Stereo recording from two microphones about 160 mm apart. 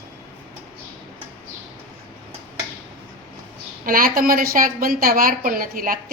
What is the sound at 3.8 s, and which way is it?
A woman's voice, 60° right (ahead or behind).